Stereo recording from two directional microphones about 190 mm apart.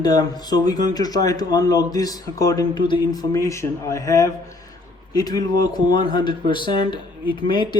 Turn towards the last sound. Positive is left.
turn(degrees=25)  # may be behind; listen again after turning